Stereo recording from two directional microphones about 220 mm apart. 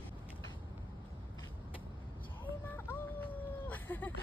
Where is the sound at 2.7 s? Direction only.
10° left (ahead or behind).